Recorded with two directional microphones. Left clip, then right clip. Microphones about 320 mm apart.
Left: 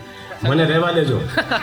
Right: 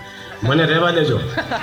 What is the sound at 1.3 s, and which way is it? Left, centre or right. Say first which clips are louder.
Speech: left 3 dB; left.